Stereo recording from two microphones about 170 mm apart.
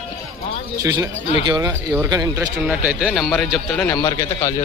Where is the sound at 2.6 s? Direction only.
10° right (ahead or behind).